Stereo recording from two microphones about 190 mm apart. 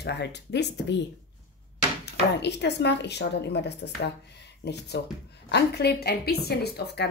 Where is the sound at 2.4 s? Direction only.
65° left (ahead or behind).